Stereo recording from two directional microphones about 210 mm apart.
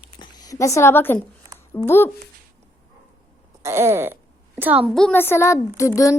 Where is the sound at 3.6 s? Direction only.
10° right (ahead or behind).